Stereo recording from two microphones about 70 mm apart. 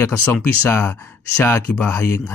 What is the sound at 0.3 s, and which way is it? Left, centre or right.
Speech, left.